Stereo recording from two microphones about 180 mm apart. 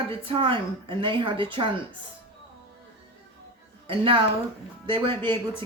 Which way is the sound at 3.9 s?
30° right (ahead or behind).